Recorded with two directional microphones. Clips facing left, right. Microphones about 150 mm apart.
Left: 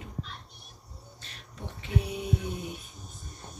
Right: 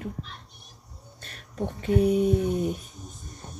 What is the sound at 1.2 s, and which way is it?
Speech, 50° right (ahead or behind).